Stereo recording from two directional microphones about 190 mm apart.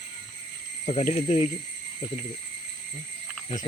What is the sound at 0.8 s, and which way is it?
Speech, 35° left (ahead or behind).